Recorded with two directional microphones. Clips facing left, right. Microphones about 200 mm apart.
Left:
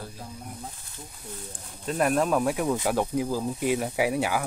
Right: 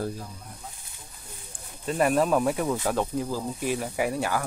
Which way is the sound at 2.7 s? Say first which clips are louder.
Left 1 dB; 15° left (ahead or behind).